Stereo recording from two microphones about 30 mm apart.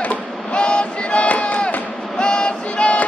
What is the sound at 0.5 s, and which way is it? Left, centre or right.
Train, left.